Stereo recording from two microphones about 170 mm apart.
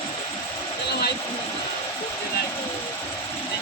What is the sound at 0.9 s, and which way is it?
Vehicle, 75° left (ahead or behind).